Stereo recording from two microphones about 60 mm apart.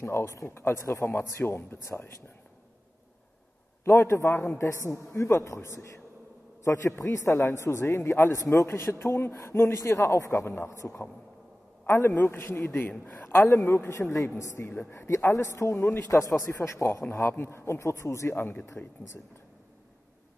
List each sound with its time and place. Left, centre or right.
0.0 s a man's voice: left
1.4 s speech: left
3.8 s a man's voice: left
13.5 s a man's voice: left
14.8 s a man's voice: left
16.5 s a man's voice: left
17.1 s a man's voice: left
18.3 s speech: left